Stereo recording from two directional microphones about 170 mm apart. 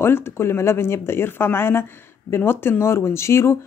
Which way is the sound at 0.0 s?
15° left (ahead or behind).